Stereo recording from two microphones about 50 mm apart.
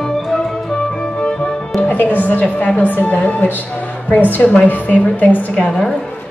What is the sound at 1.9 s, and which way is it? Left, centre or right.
A woman's voice, left.